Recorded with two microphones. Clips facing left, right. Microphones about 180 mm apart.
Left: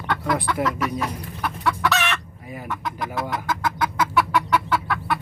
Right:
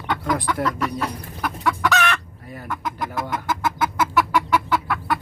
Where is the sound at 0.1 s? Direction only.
Centre (ahead or behind).